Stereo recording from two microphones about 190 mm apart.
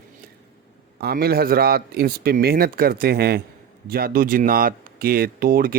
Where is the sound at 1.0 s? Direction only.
55° right (ahead or behind).